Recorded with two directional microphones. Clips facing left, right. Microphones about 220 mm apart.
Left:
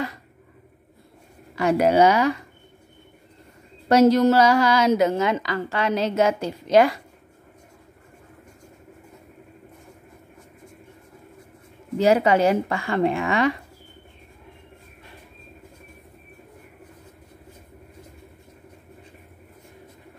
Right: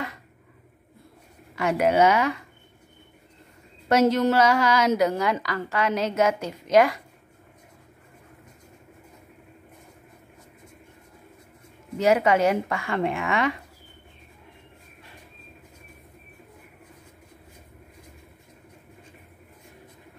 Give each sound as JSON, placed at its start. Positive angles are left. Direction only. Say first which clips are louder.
{"t": 1.5, "sound": "a woman's voice", "louder": "left 3 dB", "side_deg": 35}
{"t": 3.9, "sound": "a woman's voice", "louder": "left 4 dB", "side_deg": 35}
{"t": 12.0, "sound": "a woman's voice", "louder": "left 2 dB", "side_deg": 30}